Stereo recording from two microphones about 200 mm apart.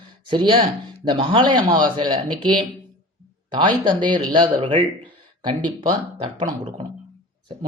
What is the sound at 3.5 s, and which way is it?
Speech, 25° right (ahead or behind).